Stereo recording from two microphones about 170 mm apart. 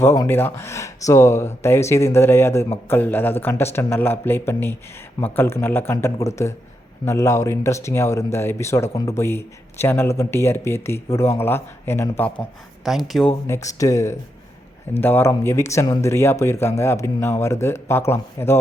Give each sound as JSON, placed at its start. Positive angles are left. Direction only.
{"t": 0.0, "sound": "speech", "side_deg": 15}
{"t": 12.8, "sound": "speech", "side_deg": 0}
{"t": 13.5, "sound": "speech", "side_deg": 20}